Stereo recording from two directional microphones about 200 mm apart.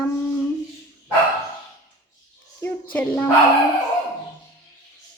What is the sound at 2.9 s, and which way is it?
Speech, 5° left (ahead or behind).